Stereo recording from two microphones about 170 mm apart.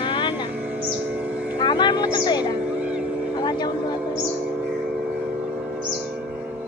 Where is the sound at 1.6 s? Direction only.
25° left (ahead or behind).